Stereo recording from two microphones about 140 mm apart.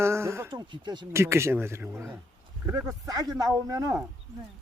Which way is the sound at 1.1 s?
20° right (ahead or behind).